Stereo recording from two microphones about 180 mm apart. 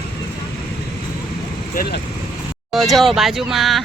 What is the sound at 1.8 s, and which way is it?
Vehicle, 60° left (ahead or behind).